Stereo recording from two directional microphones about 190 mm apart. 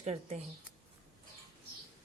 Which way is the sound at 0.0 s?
35° right (ahead or behind).